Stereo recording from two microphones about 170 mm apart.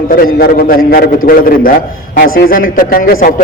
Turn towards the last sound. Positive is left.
turn(degrees=60)  # may be behind; listen again after turning